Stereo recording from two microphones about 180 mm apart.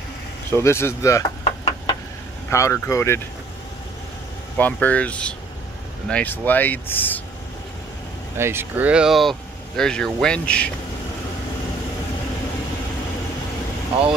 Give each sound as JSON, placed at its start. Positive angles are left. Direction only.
{"t": 0.5, "sound": "speech", "side_deg": 15}
{"t": 1.4, "sound": "knock", "side_deg": 35}
{"t": 2.5, "sound": "speech", "side_deg": 15}
{"t": 4.6, "sound": "speech", "side_deg": 10}
{"t": 8.4, "sound": "speech", "side_deg": -15}